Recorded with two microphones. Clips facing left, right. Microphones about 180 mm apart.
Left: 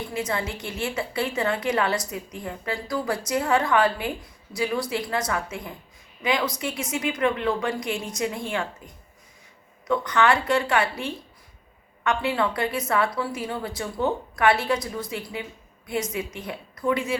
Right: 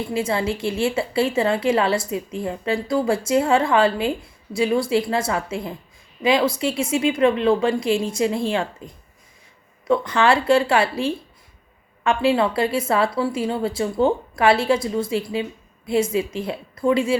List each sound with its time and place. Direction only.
0.1 s a woman's voice: 25° right (ahead or behind)
9.8 s a woman's voice: 25° right (ahead or behind)